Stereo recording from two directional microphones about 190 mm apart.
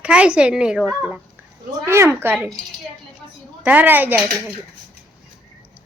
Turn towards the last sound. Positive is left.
turn(degrees=-10)  # may be behind; listen again after turning